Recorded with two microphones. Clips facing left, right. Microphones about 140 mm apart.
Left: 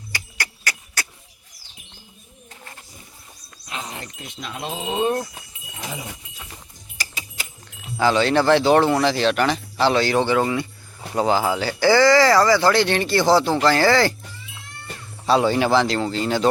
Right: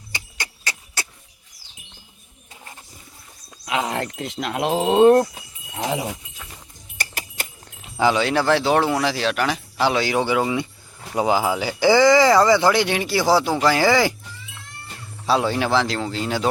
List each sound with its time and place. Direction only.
0.1 s music: 25° right (ahead or behind)
3.7 s a sound: 90° right
4.2 s speech: 75° right (ahead or behind)
5.7 s speech: 70° right (ahead or behind)
6.9 s a sound: 55° right (ahead or behind)
7.9 s speech: 10° right (ahead or behind)
15.3 s a man's voice: centre (ahead or behind)